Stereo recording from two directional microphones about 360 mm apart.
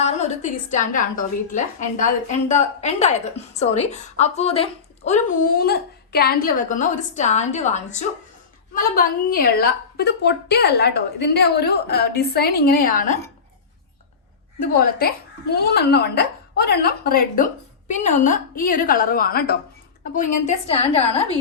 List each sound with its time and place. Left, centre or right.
0.0 s a woman's voice: centre
14.6 s a woman's voice: left